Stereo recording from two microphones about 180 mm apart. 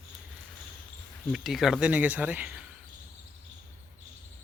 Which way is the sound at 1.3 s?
Centre (ahead or behind).